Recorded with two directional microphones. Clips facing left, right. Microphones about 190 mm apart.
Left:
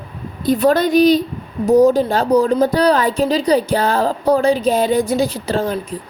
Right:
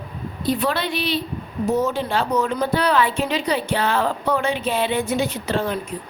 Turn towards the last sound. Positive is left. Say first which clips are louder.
# left 4 dB
turn(degrees=35)  # may be behind; listen again after turning